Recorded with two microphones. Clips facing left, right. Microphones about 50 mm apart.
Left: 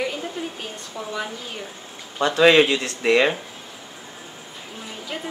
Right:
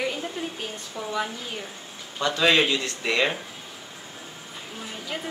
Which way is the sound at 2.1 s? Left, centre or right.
Left.